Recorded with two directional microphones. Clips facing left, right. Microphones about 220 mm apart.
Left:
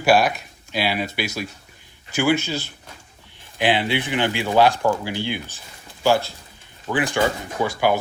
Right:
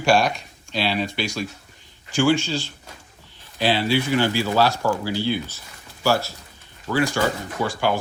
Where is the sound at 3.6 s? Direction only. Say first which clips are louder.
Even; 15° left (ahead or behind).